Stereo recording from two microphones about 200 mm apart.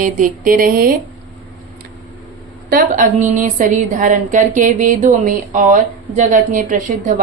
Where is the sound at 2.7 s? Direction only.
45° right (ahead or behind).